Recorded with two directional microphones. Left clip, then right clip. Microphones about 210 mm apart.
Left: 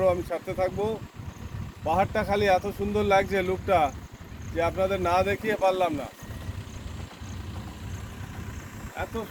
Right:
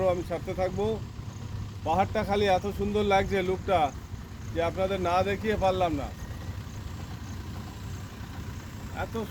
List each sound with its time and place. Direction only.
0.0 s speech: centre (ahead or behind); by 6.1 s 35° left (ahead or behind)